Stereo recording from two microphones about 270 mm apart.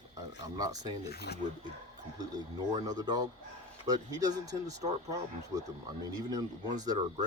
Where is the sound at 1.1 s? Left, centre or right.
Left.